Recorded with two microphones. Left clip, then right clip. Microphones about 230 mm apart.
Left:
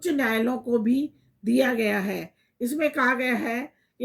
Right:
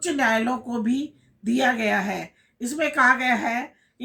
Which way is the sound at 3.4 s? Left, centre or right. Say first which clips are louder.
Right 3 dB; centre.